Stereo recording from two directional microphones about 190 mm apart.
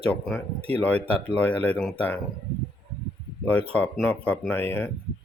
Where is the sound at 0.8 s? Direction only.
5° left (ahead or behind).